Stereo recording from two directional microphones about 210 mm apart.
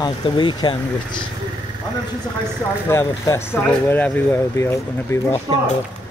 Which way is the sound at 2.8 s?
15° left (ahead or behind).